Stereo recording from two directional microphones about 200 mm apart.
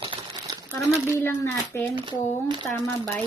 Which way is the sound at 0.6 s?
10° left (ahead or behind).